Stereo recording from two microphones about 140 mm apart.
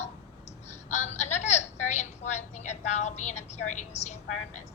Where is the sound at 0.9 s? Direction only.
55° left (ahead or behind).